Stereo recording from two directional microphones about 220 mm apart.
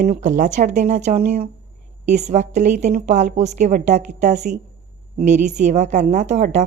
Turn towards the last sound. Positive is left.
turn(degrees=-35)  # may be behind; listen again after turning